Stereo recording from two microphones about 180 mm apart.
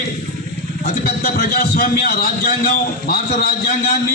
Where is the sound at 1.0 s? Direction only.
55° left (ahead or behind).